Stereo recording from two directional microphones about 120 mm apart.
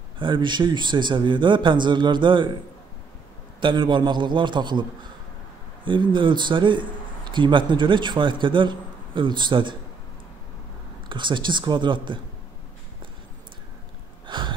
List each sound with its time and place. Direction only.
0.2 s a man's voice: 40° right (ahead or behind)
3.6 s a man's voice: 40° right (ahead or behind)
5.9 s a man's voice: 40° right (ahead or behind)
11.1 s a man's voice: 40° right (ahead or behind)
14.2 s a sound: 40° right (ahead or behind)